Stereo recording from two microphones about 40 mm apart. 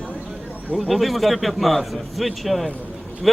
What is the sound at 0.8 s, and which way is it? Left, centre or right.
Speech, centre.